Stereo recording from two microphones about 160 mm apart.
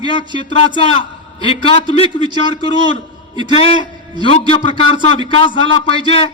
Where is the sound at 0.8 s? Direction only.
35° left (ahead or behind).